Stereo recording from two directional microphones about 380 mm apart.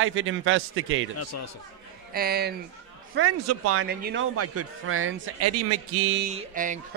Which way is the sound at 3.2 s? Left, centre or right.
Right.